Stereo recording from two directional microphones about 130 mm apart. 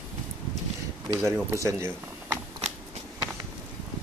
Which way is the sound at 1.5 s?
20° right (ahead or behind).